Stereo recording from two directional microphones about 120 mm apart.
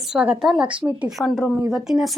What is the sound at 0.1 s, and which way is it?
A woman's voice, 5° right (ahead or behind).